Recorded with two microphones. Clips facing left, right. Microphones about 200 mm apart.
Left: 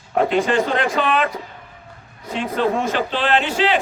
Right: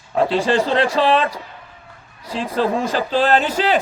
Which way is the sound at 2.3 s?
35° right (ahead or behind).